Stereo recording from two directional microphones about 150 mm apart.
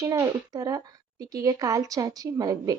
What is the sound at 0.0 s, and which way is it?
A woman's voice, 20° right (ahead or behind).